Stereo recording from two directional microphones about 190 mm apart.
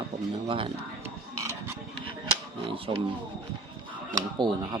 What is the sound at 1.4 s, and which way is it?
Printer, 15° right (ahead or behind).